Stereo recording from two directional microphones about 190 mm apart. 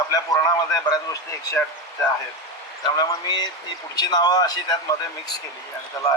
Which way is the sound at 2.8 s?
20° left (ahead or behind).